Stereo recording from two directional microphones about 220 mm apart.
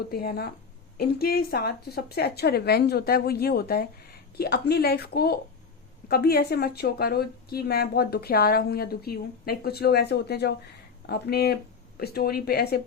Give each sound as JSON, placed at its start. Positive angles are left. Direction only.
{"t": 0.1, "sound": "speech", "side_deg": 45}